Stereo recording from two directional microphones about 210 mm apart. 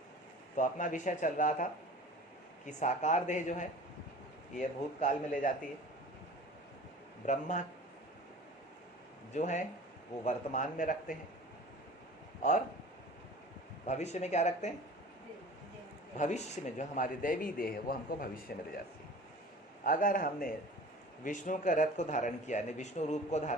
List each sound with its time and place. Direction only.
0.5 s a man's voice: 35° left (ahead or behind)
4.9 s a man's voice: 40° left (ahead or behind)
7.3 s a man's voice: 35° left (ahead or behind)
9.3 s a man's voice: 35° left (ahead or behind)
12.4 s speech: 35° left (ahead or behind)
13.8 s a man's voice: 35° left (ahead or behind)
16.1 s a man's voice: 35° left (ahead or behind)
19.8 s a man's voice: 40° left (ahead or behind)